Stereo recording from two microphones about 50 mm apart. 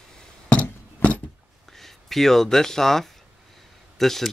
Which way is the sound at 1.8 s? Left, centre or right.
Centre.